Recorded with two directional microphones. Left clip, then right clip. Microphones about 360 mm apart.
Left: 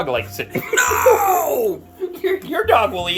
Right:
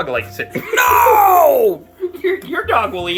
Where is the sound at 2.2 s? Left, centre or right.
Left.